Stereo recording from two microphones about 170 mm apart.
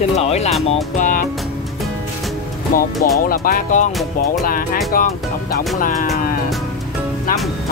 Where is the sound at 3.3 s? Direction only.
55° left (ahead or behind).